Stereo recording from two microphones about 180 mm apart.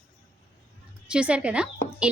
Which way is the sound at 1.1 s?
5° right (ahead or behind).